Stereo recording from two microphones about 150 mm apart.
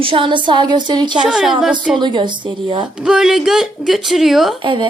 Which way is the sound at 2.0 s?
30° right (ahead or behind).